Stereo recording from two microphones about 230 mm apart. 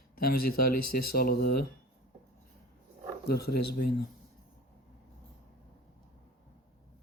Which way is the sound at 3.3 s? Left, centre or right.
Left.